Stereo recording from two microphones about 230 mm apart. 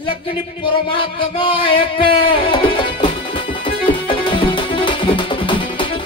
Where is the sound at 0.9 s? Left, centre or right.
Left.